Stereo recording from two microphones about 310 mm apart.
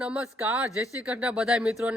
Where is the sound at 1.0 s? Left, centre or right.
Centre.